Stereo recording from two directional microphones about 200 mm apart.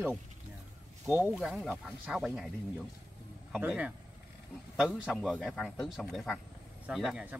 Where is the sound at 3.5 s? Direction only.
5° right (ahead or behind).